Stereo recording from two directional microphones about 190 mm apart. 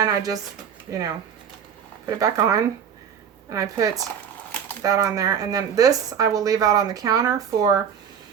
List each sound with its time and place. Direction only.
0.0 s speech: 20° right (ahead or behind)